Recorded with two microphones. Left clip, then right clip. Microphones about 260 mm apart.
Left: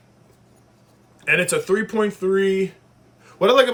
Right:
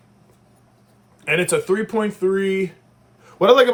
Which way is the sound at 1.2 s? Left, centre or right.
Right.